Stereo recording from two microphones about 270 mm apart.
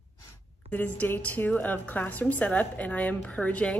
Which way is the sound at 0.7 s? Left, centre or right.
Centre.